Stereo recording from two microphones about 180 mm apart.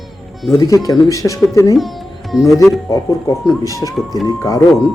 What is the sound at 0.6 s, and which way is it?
Speech, 20° left (ahead or behind).